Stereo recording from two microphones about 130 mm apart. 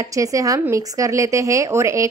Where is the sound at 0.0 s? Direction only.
25° right (ahead or behind).